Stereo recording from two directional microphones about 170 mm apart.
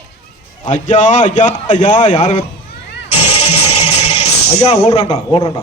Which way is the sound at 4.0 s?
40° left (ahead or behind).